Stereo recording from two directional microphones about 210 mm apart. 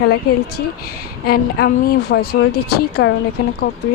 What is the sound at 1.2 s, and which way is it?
Speech, 45° left (ahead or behind).